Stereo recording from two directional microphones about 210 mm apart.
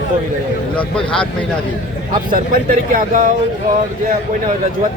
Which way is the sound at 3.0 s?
40° right (ahead or behind).